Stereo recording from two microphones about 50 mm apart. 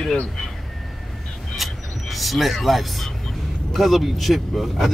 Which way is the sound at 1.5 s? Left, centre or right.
Centre.